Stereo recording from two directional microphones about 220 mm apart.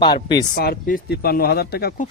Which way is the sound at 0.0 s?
20° left (ahead or behind).